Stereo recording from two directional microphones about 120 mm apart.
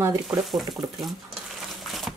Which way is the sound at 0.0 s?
25° right (ahead or behind).